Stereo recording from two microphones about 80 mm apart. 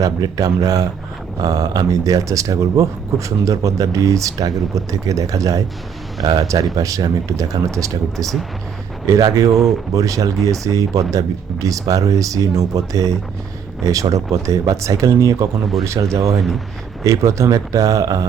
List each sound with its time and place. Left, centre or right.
0.0 s speech: right
6.7 s speech: right
9.0 s speech: right
9.5 s speech: centre
9.9 s speech: right